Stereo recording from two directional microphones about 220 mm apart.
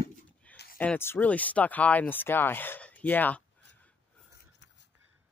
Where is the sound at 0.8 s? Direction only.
10° left (ahead or behind).